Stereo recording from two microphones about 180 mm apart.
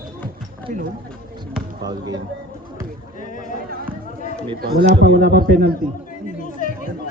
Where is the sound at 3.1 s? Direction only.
45° left (ahead or behind).